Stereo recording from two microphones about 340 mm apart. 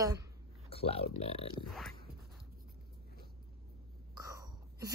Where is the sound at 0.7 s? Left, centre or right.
Centre.